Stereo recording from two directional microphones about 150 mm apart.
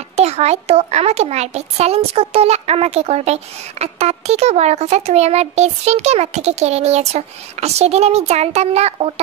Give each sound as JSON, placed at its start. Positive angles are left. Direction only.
{"t": 0.1, "sound": "speech", "side_deg": -45}